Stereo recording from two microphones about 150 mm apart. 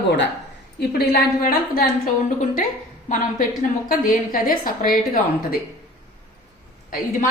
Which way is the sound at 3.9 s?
70° left (ahead or behind).